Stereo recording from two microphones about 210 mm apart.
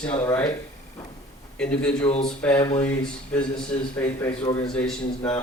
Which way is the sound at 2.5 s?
20° left (ahead or behind).